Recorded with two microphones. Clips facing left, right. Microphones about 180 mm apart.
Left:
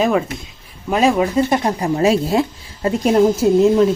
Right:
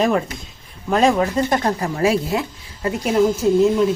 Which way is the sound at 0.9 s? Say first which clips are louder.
Left 1 dB; 5° left (ahead or behind).